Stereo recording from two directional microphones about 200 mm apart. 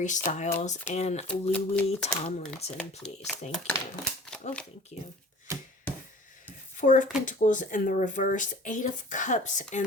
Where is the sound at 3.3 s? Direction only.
5° left (ahead or behind).